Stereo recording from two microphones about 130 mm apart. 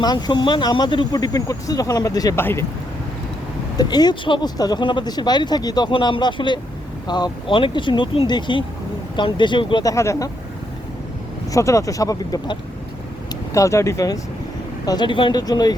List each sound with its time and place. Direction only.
0.0 s speech: 35° left (ahead or behind)
2.4 s speech: 15° left (ahead or behind)
3.8 s speech: 30° left (ahead or behind)
9.8 s speech: 25° left (ahead or behind)
11.5 s speech: 25° left (ahead or behind)